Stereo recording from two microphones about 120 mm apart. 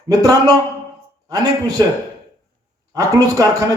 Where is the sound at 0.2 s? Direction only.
30° right (ahead or behind).